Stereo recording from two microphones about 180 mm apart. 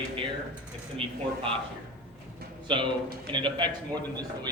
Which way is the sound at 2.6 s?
25° right (ahead or behind).